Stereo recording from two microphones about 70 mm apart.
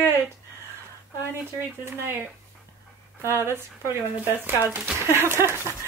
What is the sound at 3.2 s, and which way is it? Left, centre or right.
Speech, right.